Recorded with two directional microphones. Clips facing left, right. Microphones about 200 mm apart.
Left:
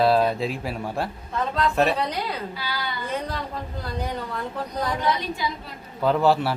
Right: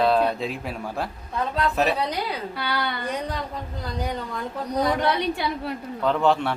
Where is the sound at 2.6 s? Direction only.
65° right (ahead or behind).